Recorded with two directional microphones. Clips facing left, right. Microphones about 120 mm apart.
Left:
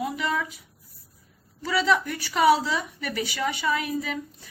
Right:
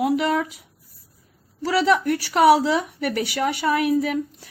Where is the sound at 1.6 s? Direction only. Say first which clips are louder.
Right 4 dB; 70° right (ahead or behind).